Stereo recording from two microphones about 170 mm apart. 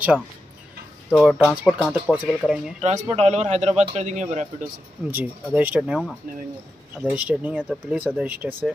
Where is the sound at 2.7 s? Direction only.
40° right (ahead or behind).